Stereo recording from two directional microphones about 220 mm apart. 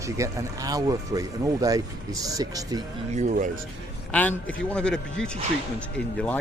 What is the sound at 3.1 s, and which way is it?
Speech, 35° right (ahead or behind).